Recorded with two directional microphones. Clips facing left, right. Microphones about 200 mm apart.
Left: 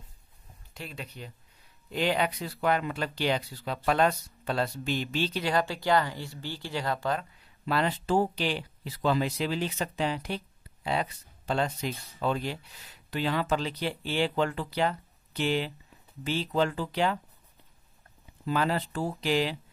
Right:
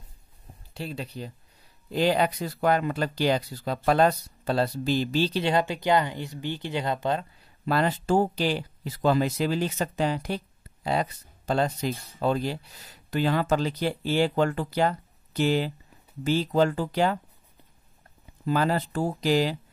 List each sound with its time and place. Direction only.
0.7 s speech: 35° right (ahead or behind)
7.6 s speech: 45° right (ahead or behind)
18.4 s speech: 40° right (ahead or behind)